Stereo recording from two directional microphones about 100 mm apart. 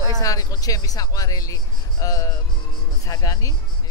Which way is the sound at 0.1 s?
35° left (ahead or behind).